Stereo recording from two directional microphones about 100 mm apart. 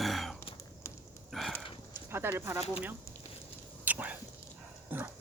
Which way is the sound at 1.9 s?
20° right (ahead or behind).